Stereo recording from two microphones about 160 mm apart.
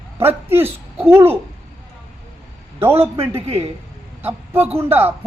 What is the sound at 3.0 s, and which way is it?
Speech, 35° right (ahead or behind).